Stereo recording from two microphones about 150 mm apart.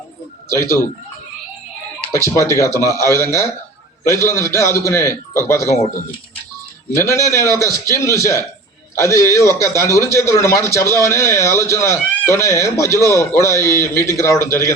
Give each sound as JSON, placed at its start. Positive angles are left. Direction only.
{"t": 2.2, "sound": "a man's voice", "side_deg": 20}
{"t": 6.9, "sound": "speech", "side_deg": 20}